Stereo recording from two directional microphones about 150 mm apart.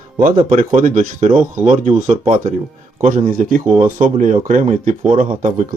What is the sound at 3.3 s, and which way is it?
Speech, 65° right (ahead or behind).